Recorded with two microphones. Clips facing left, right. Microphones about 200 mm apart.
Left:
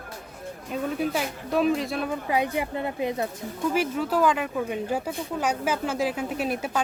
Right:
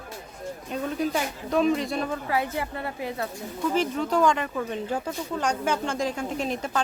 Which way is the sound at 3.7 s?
10° left (ahead or behind).